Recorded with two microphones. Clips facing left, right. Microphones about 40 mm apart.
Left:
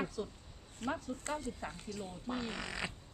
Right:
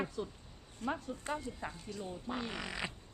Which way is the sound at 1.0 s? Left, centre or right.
Right.